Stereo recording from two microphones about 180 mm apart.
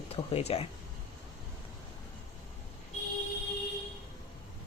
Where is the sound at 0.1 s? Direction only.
35° left (ahead or behind).